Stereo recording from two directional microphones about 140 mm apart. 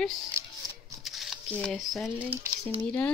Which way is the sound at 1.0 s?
Centre (ahead or behind).